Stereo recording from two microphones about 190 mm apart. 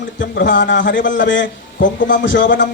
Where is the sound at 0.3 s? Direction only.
70° left (ahead or behind).